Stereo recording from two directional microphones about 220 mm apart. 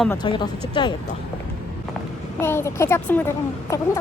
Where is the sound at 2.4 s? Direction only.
10° left (ahead or behind).